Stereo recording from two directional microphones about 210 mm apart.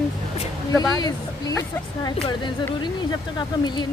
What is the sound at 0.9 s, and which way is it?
A woman's voice, 20° left (ahead or behind).